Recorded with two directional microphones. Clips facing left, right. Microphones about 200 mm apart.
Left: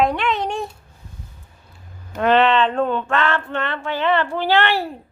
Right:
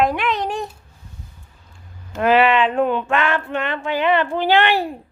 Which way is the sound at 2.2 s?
5° right (ahead or behind).